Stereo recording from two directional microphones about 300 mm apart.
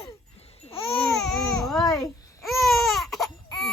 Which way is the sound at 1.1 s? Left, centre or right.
Centre.